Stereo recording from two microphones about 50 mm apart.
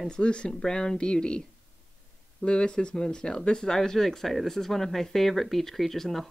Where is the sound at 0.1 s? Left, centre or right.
Centre.